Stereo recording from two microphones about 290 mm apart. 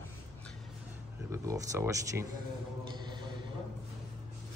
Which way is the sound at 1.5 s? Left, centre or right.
Centre.